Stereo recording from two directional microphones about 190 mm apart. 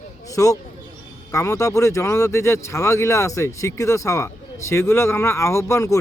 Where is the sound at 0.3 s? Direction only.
15° left (ahead or behind).